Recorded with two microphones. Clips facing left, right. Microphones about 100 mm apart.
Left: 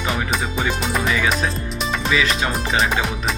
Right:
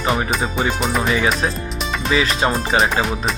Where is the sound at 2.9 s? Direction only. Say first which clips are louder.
Right 2 dB; centre (ahead or behind).